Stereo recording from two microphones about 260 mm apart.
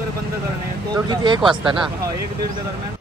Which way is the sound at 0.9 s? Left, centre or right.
Centre.